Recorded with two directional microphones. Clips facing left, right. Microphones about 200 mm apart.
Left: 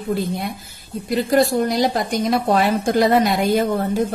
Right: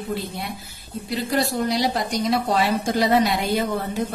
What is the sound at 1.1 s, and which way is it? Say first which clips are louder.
A woman's voice: left 7 dB; 50° left (ahead or behind).